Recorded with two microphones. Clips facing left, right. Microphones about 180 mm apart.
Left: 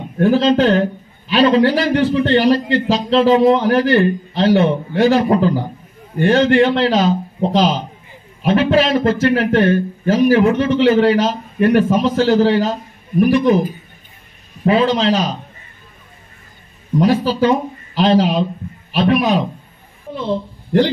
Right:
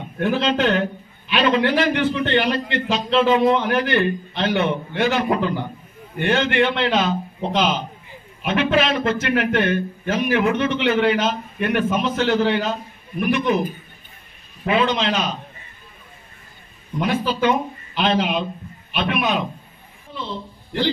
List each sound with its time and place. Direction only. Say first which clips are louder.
0.2 s a man's voice: left 7 dB; 35° left (ahead or behind)
17.0 s a man's voice: left 6 dB; 35° left (ahead or behind)